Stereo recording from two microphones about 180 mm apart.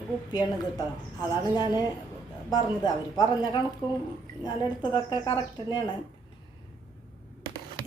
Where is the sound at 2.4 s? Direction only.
20° left (ahead or behind).